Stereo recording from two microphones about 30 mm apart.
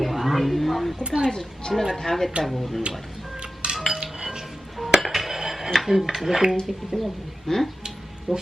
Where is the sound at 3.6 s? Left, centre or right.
Right.